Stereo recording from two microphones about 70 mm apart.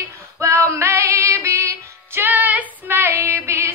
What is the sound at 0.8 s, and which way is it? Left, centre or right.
Female singing, right.